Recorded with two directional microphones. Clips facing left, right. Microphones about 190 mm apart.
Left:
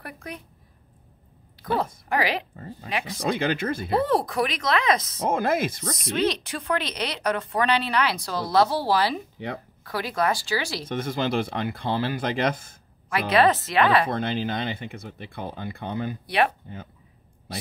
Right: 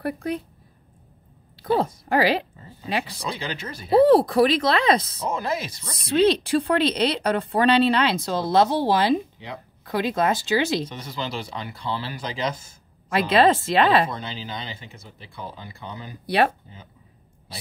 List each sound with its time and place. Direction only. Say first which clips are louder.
0.0 s speech: right 11 dB; 30° right (ahead or behind)
2.0 s speech: right 6 dB; 30° right (ahead or behind)
2.5 s speech: right 3 dB; 50° left (ahead or behind)
4.0 s speech: right 11 dB; 35° right (ahead or behind)
5.2 s speech: left 4 dB; 55° left (ahead or behind)
5.9 s speech: right 7 dB; 30° right (ahead or behind)
10.9 s speech: left 6 dB; 50° left (ahead or behind)
13.1 s speech: right 2 dB; 25° right (ahead or behind)
14.0 s speech: left 5 dB; 55° left (ahead or behind)
16.3 s speech: right 3 dB; 35° right (ahead or behind)